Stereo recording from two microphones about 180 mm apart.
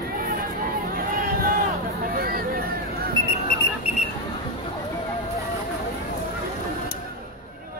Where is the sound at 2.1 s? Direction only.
55° right (ahead or behind).